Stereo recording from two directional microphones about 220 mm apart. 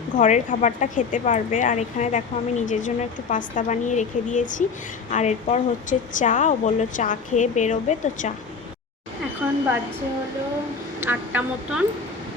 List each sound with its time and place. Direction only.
0.2 s a woman's voice: 35° left (ahead or behind)
11.0 s a woman's voice: 10° right (ahead or behind)